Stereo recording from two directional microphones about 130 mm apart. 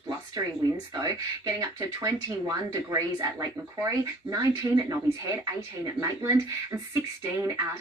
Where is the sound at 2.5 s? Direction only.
25° right (ahead or behind).